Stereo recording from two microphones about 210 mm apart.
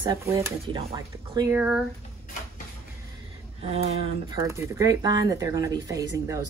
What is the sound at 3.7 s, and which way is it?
Speech, 30° right (ahead or behind).